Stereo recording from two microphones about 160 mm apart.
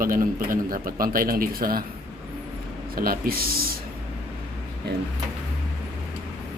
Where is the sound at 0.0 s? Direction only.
60° right (ahead or behind).